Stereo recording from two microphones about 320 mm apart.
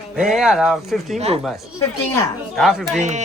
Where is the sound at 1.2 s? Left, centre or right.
Centre.